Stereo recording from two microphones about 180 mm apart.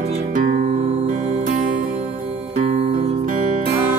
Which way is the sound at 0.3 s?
45° right (ahead or behind).